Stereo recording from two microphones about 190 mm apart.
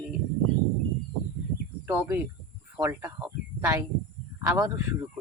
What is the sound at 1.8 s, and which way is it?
Speech, 10° right (ahead or behind).